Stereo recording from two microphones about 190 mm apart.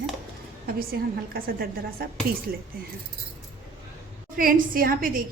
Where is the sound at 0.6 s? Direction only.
50° right (ahead or behind).